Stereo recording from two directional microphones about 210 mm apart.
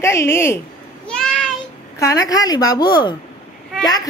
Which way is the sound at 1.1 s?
5° left (ahead or behind).